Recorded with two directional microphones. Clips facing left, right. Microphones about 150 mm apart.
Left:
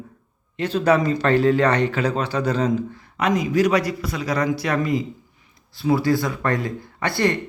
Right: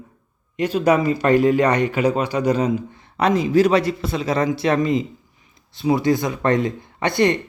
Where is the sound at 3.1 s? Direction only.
30° right (ahead or behind).